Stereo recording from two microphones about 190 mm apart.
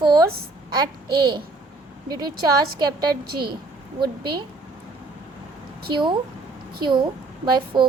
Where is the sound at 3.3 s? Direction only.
55° right (ahead or behind).